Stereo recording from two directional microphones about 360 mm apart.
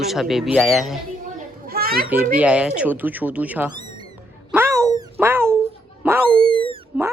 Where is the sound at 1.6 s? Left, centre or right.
Right.